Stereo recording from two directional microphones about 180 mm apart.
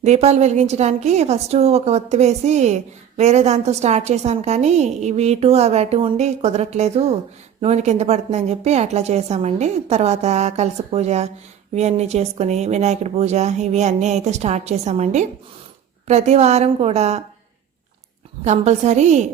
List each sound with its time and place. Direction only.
0.0 s a woman's voice: 40° right (ahead or behind)
18.4 s a woman's voice: 40° right (ahead or behind)